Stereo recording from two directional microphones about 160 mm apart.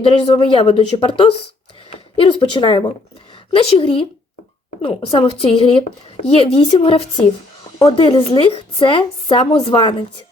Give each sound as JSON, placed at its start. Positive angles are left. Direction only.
{"t": 0.0, "sound": "speech", "side_deg": 35}